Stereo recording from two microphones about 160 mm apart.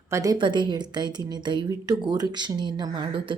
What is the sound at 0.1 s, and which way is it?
Speech, 20° right (ahead or behind).